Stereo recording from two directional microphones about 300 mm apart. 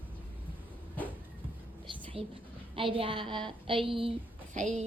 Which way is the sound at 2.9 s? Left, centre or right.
Centre.